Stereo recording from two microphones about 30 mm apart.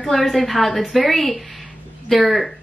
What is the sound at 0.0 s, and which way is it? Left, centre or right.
A woman's voice, centre.